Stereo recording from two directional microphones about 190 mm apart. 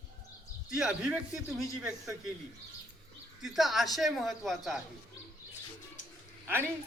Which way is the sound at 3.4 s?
Centre (ahead or behind).